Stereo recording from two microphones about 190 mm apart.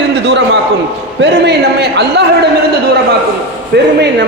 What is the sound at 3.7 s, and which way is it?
Speech, 60° right (ahead or behind).